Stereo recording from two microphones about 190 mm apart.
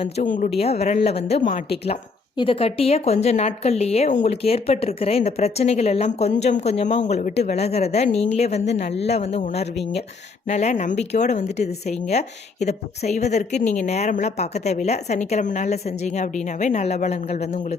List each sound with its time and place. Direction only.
0.0 s speech: 40° left (ahead or behind)
1.4 s speech: 45° left (ahead or behind)
2.4 s speech: 30° left (ahead or behind)